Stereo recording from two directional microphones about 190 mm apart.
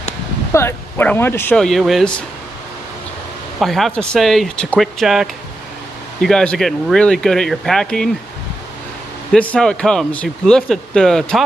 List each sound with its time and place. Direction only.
0.5 s speech: 15° left (ahead or behind)
3.5 s speech: centre (ahead or behind)
9.3 s speech: 5° left (ahead or behind)